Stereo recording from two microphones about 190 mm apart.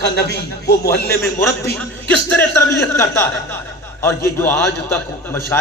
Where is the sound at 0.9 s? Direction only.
55° left (ahead or behind).